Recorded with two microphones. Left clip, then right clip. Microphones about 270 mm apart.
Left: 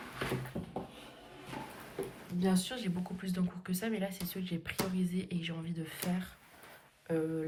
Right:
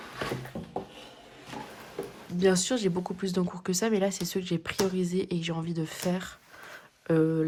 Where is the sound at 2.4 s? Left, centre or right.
Right.